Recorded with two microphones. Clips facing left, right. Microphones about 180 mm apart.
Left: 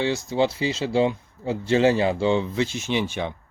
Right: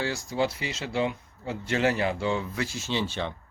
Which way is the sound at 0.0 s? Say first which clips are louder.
Left 5 dB; 25° left (ahead or behind).